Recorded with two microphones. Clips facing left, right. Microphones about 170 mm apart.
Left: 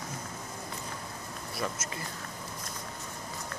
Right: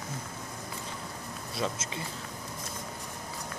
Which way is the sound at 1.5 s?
20° right (ahead or behind).